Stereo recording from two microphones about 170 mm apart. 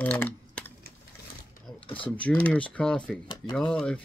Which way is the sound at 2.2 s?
10° left (ahead or behind).